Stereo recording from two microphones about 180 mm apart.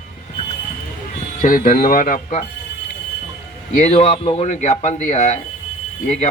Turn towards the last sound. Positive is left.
turn(degrees=40)  # may be behind; listen again after turning